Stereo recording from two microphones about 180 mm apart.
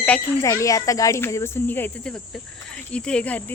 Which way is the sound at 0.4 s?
20° left (ahead or behind).